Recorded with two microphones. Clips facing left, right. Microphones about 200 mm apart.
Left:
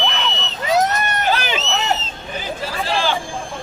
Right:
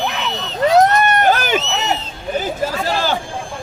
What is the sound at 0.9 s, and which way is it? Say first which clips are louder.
Run: right 6 dB; 60° right (ahead or behind).